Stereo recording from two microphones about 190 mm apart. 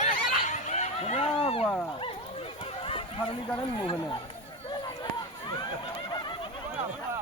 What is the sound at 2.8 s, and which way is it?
Chicken, 30° left (ahead or behind).